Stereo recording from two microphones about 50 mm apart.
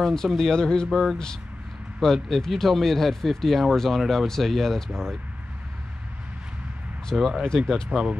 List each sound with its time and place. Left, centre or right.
0.0 s speech: centre
7.2 s speech: centre
7.4 s speech: centre